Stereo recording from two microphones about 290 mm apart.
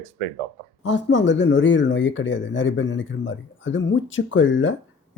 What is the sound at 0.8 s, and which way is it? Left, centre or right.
Speech, left.